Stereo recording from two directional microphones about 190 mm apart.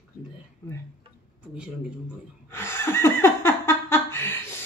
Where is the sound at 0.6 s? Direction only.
10° left (ahead or behind).